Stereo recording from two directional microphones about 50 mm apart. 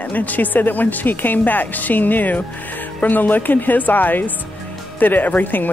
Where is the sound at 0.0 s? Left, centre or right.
Left.